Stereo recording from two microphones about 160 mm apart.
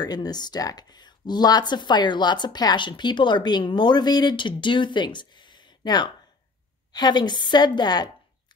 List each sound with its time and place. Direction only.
0.0 s speech: 25° left (ahead or behind)